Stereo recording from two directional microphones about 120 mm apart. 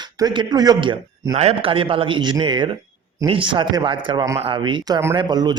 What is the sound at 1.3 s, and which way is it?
A man's voice, 55° right (ahead or behind).